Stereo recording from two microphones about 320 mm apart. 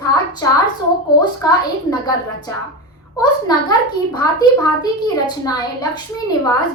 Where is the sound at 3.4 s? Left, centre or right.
Centre.